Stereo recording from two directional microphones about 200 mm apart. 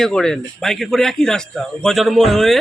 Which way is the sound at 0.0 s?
Centre (ahead or behind).